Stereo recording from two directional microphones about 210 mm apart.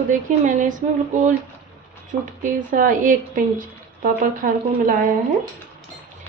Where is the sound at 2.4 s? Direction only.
40° right (ahead or behind).